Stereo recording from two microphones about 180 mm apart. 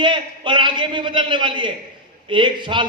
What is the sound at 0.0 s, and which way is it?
A man's voice, 25° right (ahead or behind).